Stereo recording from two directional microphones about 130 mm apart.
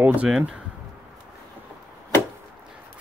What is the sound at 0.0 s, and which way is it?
Speech, 10° right (ahead or behind).